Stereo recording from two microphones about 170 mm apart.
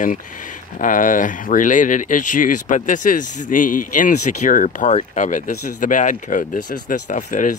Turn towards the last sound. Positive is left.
turn(degrees=45)  # may be behind; listen again after turning